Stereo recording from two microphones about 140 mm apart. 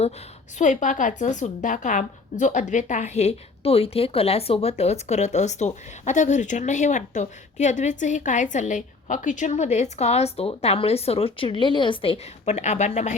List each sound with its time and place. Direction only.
0.6 s a woman's voice: 65° left (ahead or behind)